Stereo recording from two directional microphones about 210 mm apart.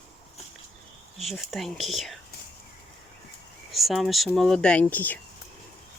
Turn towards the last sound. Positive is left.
turn(degrees=10)  # may be behind; listen again after turning